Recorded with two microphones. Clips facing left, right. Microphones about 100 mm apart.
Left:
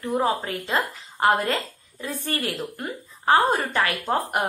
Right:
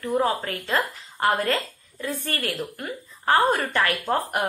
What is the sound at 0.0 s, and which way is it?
A woman's voice, 20° left (ahead or behind).